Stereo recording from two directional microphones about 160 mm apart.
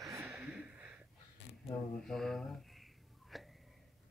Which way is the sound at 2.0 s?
Centre (ahead or behind).